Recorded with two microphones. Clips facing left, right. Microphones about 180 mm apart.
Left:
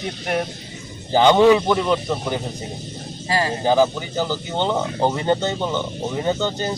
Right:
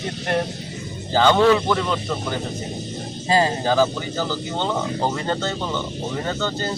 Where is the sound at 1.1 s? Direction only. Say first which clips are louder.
Left 3 dB; 15° left (ahead or behind).